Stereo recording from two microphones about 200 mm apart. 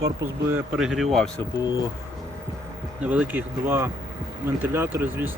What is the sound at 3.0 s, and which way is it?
Speech, 5° right (ahead or behind).